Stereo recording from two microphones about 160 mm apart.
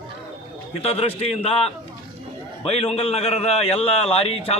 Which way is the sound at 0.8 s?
40° left (ahead or behind).